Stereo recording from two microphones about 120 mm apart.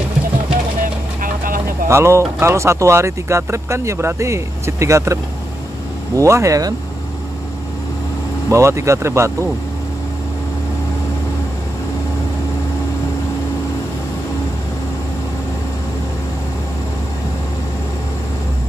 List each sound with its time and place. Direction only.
1.9 s speech: 20° right (ahead or behind)
8.5 s speech: 25° right (ahead or behind)